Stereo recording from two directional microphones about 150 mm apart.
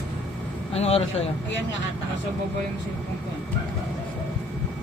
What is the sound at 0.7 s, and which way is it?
Speech, 45° left (ahead or behind).